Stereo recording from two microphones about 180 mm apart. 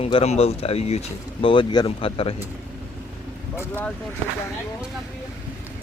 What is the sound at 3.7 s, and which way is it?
Speech, 10° left (ahead or behind).